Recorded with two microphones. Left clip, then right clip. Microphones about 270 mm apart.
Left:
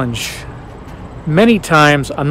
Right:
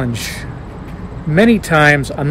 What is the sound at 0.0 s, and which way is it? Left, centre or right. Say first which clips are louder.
Speech: left 2 dB; centre.